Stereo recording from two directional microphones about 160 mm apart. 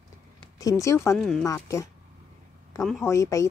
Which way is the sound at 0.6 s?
20° left (ahead or behind).